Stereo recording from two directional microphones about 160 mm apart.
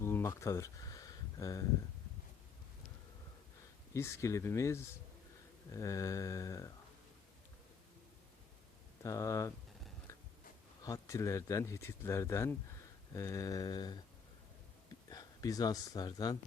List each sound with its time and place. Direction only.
0.0 s a sound: 15° left (ahead or behind)
3.9 s speech: 20° left (ahead or behind)
5.7 s mantra: 20° left (ahead or behind)
9.0 s mantra: 20° left (ahead or behind)
10.1 s biting: 20° left (ahead or behind)
10.8 s speech: 20° left (ahead or behind)
13.1 s mantra: 20° left (ahead or behind)
15.1 s speech: 25° left (ahead or behind)